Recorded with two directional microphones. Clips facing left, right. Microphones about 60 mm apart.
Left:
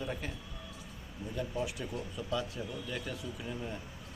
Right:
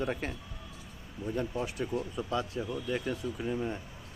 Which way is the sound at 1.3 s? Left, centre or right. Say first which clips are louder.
Right 2 dB; right.